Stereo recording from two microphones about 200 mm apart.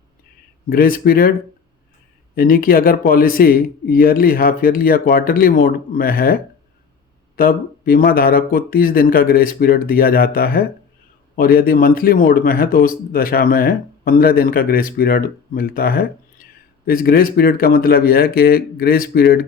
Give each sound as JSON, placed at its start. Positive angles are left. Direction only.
{"t": 0.7, "sound": "a man's voice", "side_deg": 45}